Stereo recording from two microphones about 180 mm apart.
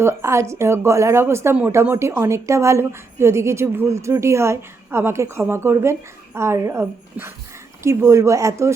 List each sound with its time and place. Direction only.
0.0 s a woman's voice: 15° right (ahead or behind)